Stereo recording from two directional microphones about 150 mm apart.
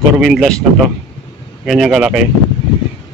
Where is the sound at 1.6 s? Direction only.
Centre (ahead or behind).